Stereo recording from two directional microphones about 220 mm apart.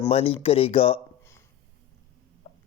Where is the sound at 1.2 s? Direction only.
10° left (ahead or behind).